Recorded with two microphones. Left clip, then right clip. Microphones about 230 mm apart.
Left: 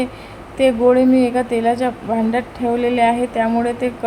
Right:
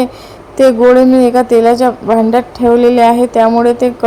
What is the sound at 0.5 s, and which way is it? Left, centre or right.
A woman's voice, centre.